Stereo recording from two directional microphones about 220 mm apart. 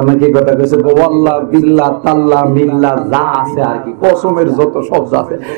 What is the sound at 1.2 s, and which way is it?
A man's voice, 20° right (ahead or behind).